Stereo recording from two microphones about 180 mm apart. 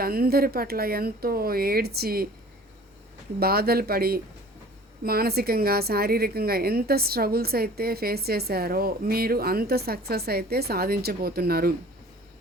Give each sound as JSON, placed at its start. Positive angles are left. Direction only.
{"t": 0.0, "sound": "a woman's voice", "side_deg": -55}
{"t": 3.4, "sound": "a woman's voice", "side_deg": -60}